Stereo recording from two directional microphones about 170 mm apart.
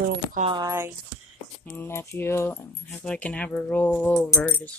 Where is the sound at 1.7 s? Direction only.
15° left (ahead or behind).